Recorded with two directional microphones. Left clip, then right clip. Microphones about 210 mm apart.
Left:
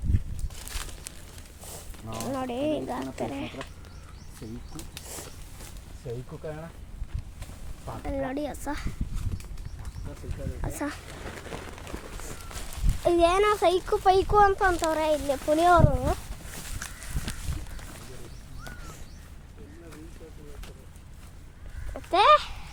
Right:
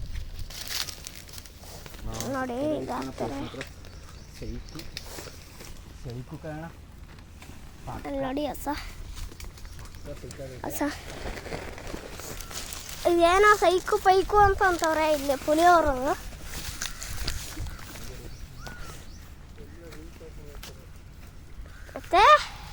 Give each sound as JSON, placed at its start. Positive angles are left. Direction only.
{"t": 2.3, "sound": "speech", "side_deg": 10}
{"t": 8.0, "sound": "a child's voice", "side_deg": 0}
{"t": 10.6, "sound": "speech", "side_deg": -5}
{"t": 11.1, "sound": "run", "side_deg": -25}
{"t": 13.0, "sound": "a child's voice", "side_deg": -5}
{"t": 16.8, "sound": "run", "side_deg": -30}
{"t": 17.3, "sound": "boat", "side_deg": -30}
{"t": 21.9, "sound": "a sound", "side_deg": -5}